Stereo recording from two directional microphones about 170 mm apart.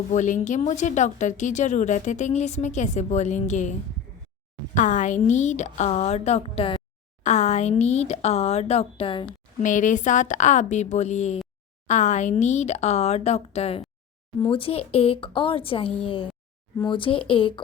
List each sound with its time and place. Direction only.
0.1 s speech: 45° left (ahead or behind)
7.2 s speech: 45° left (ahead or behind)
9.6 s speech: 50° left (ahead or behind); by 17.6 s 30° left (ahead or behind)